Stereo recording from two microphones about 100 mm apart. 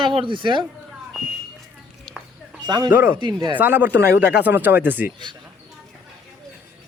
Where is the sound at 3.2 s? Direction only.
55° right (ahead or behind).